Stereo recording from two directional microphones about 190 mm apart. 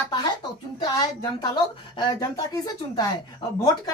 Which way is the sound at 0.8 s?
20° left (ahead or behind).